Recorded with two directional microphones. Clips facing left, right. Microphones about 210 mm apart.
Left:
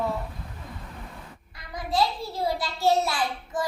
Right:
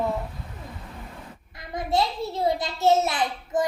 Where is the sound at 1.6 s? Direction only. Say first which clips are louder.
Right 1 dB; 25° right (ahead or behind).